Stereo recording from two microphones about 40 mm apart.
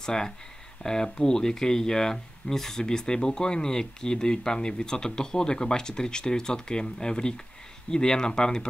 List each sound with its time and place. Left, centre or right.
0.0 s speech: centre